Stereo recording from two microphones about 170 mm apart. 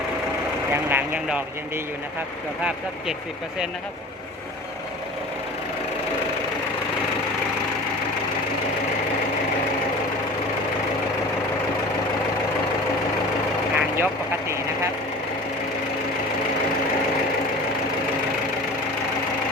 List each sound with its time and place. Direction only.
0.7 s speech: 10° right (ahead or behind)
13.7 s vehicle: 10° right (ahead or behind)